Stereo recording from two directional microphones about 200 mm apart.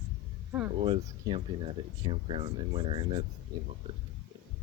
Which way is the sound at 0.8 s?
25° right (ahead or behind).